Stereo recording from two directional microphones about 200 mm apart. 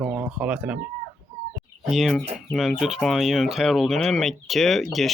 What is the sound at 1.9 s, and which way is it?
Speech, centre (ahead or behind).